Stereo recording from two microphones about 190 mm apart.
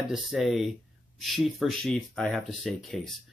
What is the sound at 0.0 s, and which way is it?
Speech, centre (ahead or behind).